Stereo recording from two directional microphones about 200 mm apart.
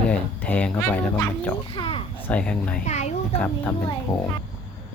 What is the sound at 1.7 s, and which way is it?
Speech, 25° left (ahead or behind).